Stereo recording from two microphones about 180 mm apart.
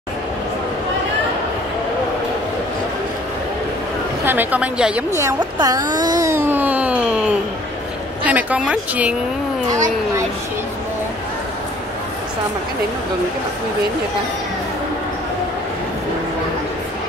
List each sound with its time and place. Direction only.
4.3 s a woman's voice: 10° right (ahead or behind)
5.1 s a sound: 20° right (ahead or behind)
8.2 s speech: 10° right (ahead or behind)